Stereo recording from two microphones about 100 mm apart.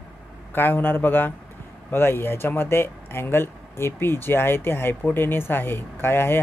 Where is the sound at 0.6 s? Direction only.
20° left (ahead or behind).